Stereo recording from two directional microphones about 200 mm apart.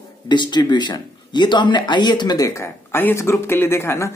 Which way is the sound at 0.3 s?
20° left (ahead or behind).